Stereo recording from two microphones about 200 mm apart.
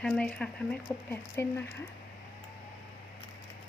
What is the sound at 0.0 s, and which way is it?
Speech, 5° left (ahead or behind).